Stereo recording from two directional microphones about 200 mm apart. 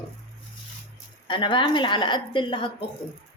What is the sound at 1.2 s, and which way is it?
A woman's voice, 25° left (ahead or behind).